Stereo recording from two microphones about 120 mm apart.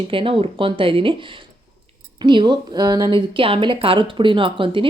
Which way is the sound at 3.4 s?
45° right (ahead or behind).